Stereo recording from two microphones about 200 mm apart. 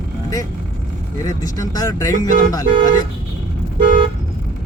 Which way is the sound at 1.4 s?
20° left (ahead or behind).